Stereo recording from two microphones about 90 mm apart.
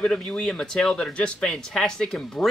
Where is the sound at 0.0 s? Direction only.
10° left (ahead or behind).